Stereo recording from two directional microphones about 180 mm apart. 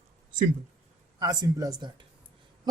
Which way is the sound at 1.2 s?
20° right (ahead or behind).